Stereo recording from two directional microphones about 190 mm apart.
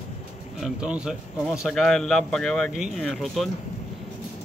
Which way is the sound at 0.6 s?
5° right (ahead or behind).